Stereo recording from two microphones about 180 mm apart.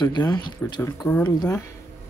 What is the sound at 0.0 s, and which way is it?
Speech, 20° left (ahead or behind).